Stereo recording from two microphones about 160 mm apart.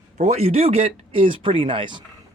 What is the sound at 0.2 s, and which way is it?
Speech, 45° right (ahead or behind).